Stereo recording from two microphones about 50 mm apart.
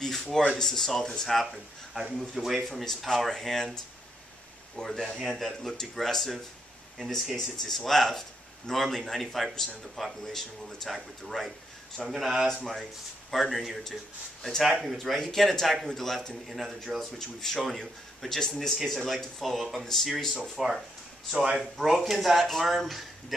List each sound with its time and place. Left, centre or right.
0.0 s a sound: centre
0.6 s a man's voice: centre
4.7 s a man's voice: centre
7.3 s a man's voice: centre